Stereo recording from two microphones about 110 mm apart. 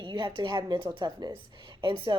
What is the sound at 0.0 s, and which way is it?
Speech, 45° right (ahead or behind).